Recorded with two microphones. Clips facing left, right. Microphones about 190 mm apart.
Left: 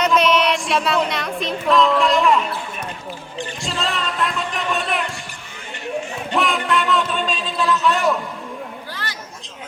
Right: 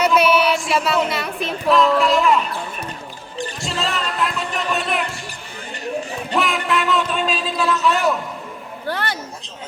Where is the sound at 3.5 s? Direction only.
Centre (ahead or behind).